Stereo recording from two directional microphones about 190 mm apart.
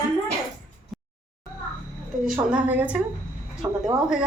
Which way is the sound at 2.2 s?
5° right (ahead or behind).